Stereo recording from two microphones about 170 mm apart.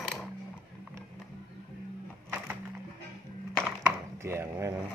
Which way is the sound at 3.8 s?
15° right (ahead or behind).